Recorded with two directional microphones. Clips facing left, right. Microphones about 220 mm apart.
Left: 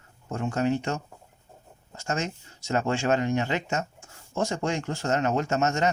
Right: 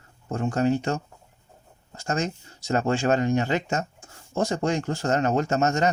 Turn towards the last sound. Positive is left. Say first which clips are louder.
# right 2 dB
turn(degrees=-40)  # may be behind; listen again after turning